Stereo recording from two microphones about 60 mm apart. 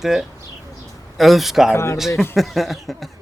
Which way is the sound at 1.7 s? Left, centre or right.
Left.